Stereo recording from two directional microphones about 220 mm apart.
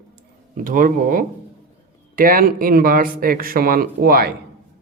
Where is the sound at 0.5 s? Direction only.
35° right (ahead or behind).